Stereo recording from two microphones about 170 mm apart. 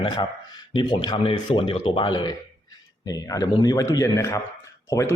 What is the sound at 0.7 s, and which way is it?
A man's voice, 25° left (ahead or behind).